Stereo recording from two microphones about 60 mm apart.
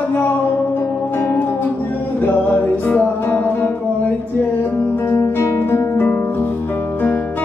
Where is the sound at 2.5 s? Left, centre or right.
Left.